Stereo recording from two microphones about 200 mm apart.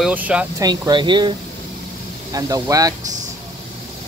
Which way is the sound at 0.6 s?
20° right (ahead or behind).